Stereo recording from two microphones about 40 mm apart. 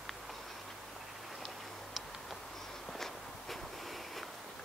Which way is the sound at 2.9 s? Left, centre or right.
Centre.